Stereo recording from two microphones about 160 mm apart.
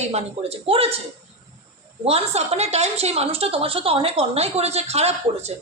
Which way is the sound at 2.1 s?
40° right (ahead or behind).